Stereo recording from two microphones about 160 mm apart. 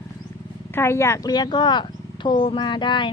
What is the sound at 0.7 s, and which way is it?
Speech, 15° left (ahead or behind).